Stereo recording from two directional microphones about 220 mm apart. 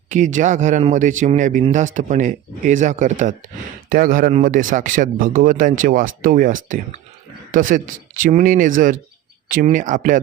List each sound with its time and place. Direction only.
0.1 s a man's voice: 35° right (ahead or behind)